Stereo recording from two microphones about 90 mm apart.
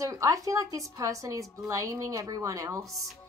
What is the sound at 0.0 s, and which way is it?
A woman's voice, 40° right (ahead or behind).